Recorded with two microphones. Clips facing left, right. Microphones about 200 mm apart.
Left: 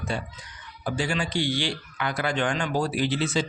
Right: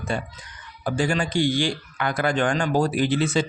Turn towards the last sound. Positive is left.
turn(degrees=-55)  # may be behind; listen again after turning